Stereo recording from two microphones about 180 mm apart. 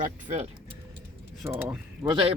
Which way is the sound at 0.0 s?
40° right (ahead or behind).